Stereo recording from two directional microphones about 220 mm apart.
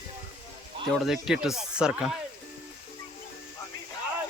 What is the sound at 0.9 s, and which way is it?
Speech, centre (ahead or behind).